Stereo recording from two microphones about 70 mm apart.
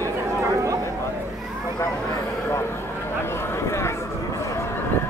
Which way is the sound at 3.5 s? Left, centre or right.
Left.